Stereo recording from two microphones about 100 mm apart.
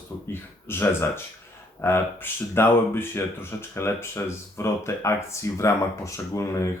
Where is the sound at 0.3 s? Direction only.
20° left (ahead or behind).